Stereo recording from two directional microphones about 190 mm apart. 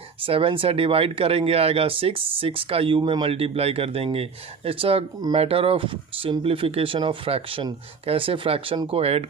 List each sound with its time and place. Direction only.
0.2 s speech: 30° right (ahead or behind)